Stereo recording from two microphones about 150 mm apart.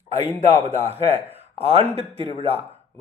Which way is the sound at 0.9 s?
40° right (ahead or behind).